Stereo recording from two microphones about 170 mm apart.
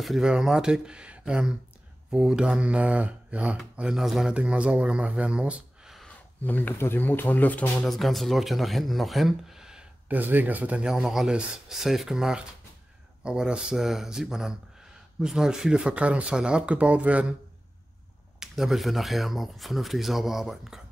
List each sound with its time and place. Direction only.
0.0 s speech: 5° right (ahead or behind)
6.4 s speech: 10° left (ahead or behind); by 17.4 s 5° right (ahead or behind)
18.4 s speech: centre (ahead or behind)